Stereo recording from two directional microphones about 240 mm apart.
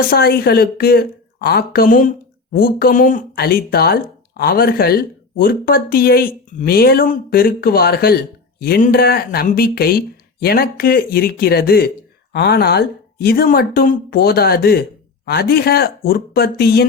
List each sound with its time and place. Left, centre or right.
0.1 s a woman's voice: left